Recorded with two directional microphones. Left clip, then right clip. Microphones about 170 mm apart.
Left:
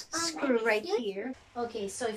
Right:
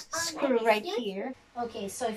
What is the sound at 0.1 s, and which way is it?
A woman's voice, 20° right (ahead or behind).